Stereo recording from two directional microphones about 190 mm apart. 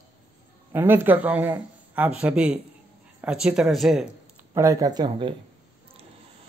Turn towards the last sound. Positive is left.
turn(degrees=-25)  # may be behind; listen again after turning